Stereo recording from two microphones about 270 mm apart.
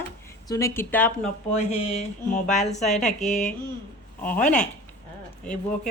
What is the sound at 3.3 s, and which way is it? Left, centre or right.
Speech, centre.